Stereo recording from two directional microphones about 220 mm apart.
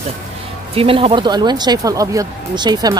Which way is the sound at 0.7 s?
25° right (ahead or behind).